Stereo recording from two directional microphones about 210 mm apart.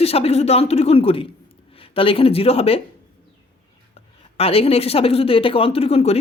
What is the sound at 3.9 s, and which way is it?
Speech, 30° left (ahead or behind).